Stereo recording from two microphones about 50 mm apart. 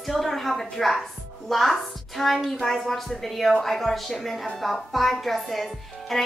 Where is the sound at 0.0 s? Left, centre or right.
Centre.